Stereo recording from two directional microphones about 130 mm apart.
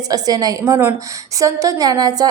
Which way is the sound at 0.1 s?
30° right (ahead or behind).